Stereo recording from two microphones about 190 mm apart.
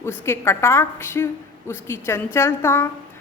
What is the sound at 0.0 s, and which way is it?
A woman's voice, 10° left (ahead or behind).